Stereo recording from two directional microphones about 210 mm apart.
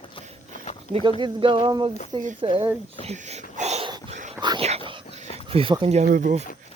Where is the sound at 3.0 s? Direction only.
30° right (ahead or behind).